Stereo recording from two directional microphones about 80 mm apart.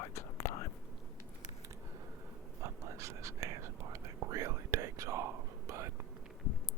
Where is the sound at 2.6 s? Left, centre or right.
Right.